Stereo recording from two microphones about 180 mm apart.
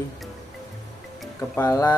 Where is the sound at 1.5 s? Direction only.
15° left (ahead or behind).